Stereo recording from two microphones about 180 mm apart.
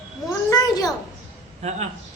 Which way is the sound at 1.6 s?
35° right (ahead or behind).